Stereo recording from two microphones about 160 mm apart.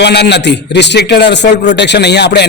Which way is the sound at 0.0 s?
90° left.